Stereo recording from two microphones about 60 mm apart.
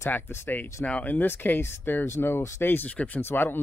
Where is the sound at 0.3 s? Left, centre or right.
Left.